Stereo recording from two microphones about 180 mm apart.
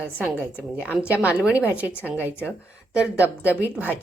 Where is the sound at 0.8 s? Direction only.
5° right (ahead or behind).